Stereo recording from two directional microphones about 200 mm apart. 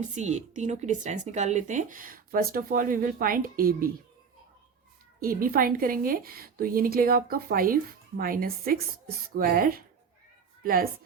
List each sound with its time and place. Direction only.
0.0 s speech: 35° right (ahead or behind)
5.2 s a woman's voice: 45° right (ahead or behind)